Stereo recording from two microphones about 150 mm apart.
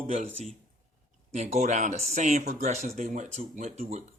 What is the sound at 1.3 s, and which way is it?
Speech, 50° right (ahead or behind).